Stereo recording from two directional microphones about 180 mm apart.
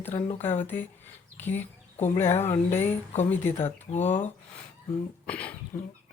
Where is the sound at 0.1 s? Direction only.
35° left (ahead or behind).